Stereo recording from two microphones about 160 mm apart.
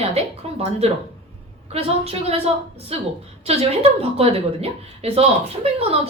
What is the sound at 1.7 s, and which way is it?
A woman's voice, 40° right (ahead or behind).